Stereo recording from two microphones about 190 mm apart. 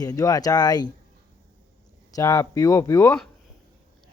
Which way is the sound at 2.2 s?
15° left (ahead or behind).